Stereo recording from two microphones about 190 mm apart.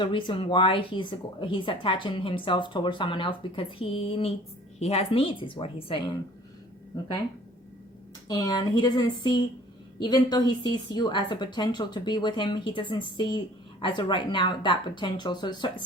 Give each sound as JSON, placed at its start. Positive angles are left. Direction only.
{"t": 0.0, "sound": "speech", "side_deg": 25}
{"t": 8.3, "sound": "speech", "side_deg": 20}